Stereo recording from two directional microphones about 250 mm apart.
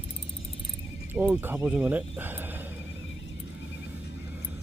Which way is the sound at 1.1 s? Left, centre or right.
Centre.